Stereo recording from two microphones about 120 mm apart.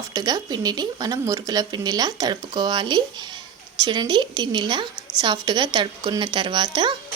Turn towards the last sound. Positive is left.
turn(degrees=-40)  # may be behind; listen again after turning